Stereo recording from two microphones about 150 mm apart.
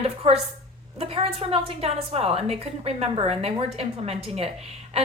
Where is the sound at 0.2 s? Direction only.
40° right (ahead or behind).